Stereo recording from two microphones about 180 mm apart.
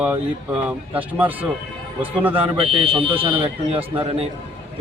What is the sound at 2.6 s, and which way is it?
Speech, 30° right (ahead or behind).